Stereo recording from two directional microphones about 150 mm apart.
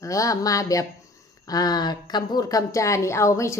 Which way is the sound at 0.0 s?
20° left (ahead or behind).